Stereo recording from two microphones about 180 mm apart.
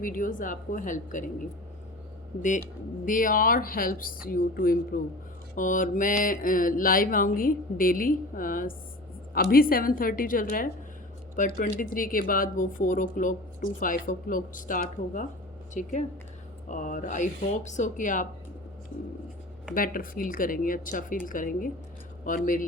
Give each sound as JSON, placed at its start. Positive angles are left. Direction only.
{"t": 0.0, "sound": "speech", "side_deg": 50}
{"t": 2.4, "sound": "speech", "side_deg": 45}
{"t": 19.7, "sound": "speech", "side_deg": 50}